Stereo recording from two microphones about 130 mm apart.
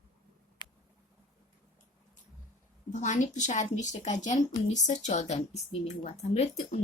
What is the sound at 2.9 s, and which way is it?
A woman's voice, 70° left (ahead or behind).